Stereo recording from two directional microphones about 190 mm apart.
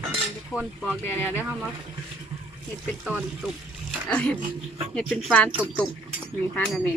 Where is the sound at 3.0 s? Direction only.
5° right (ahead or behind).